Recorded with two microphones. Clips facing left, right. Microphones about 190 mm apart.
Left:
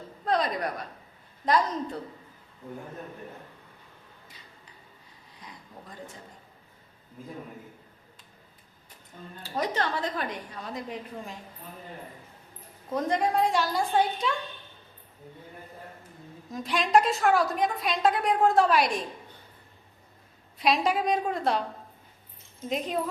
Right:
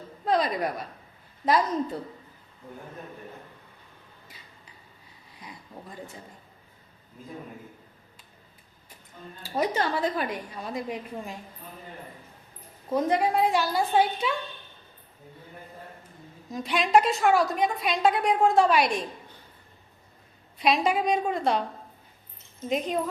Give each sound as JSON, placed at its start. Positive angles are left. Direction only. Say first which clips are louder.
{"t": 0.3, "sound": "a sound", "louder": "right 2 dB", "side_deg": -5}
{"t": 1.5, "sound": "a woman's voice", "louder": "right 2 dB", "side_deg": -5}
{"t": 9.4, "sound": "a woman's voice", "louder": "right 3 dB", "side_deg": -10}
{"t": 12.9, "sound": "a woman's voice", "louder": "right 2 dB", "side_deg": -5}
{"t": 16.5, "sound": "a woman's voice", "louder": "right 1 dB", "side_deg": 0}
{"t": 20.6, "sound": "a woman's voice", "louder": "right 1 dB", "side_deg": 0}
{"t": 22.7, "sound": "a woman's voice", "louder": "right 3 dB", "side_deg": 0}